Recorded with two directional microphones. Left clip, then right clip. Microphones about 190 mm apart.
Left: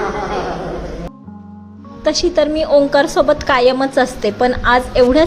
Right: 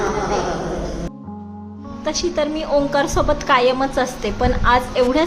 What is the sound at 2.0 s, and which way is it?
A woman's voice, 30° left (ahead or behind).